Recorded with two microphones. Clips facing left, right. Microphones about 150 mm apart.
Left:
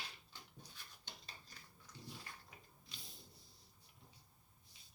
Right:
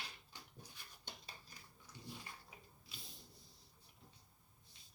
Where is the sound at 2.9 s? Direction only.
5° right (ahead or behind).